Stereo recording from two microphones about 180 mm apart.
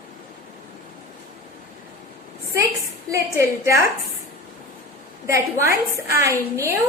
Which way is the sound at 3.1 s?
15° right (ahead or behind).